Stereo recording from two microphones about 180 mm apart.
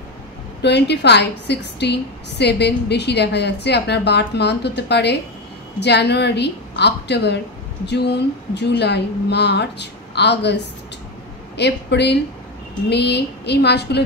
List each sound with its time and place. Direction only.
0.6 s a woman's voice: 70° left (ahead or behind)